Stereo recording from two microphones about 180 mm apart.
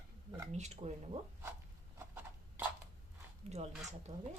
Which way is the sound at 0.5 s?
40° right (ahead or behind).